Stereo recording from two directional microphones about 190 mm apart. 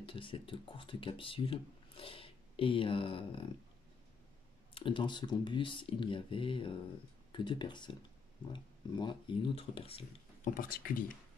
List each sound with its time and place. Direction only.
0.0 s speech: 25° left (ahead or behind)
4.7 s speech: 25° left (ahead or behind)
10.5 s speech: 50° left (ahead or behind)